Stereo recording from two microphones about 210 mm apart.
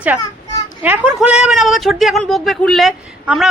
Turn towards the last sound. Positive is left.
turn(degrees=0)  # may be behind; listen again after turning